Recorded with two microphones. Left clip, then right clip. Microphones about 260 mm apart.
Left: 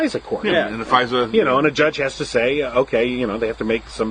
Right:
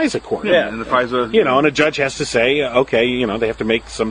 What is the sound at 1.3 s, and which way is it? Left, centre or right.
Speech, right.